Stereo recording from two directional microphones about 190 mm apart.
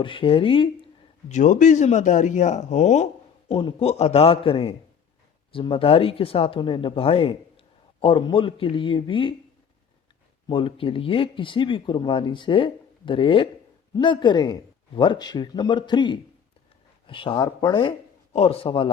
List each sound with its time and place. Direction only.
0.0 s speech: 25° left (ahead or behind)
1.3 s a man's voice: 40° left (ahead or behind); by 9.3 s 25° left (ahead or behind)
10.4 s speech: 25° left (ahead or behind)